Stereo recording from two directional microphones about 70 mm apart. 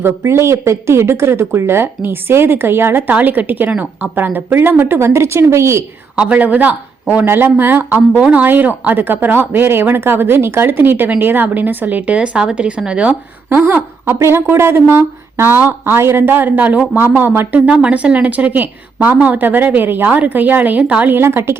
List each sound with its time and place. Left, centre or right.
0.0 s speech: right
6.1 s speech: right
13.5 s speech: right
17.7 s speech: centre
21.1 s speech: right